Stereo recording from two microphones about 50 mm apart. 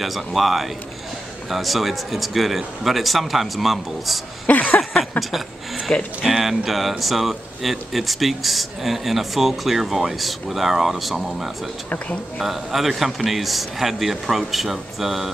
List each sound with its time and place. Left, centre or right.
0.0 s speech: centre
4.5 s speech: left
5.9 s speech: left
6.2 s speech: centre